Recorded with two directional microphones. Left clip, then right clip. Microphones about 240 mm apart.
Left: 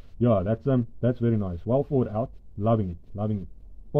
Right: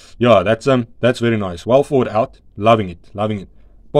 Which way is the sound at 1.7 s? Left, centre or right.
Right.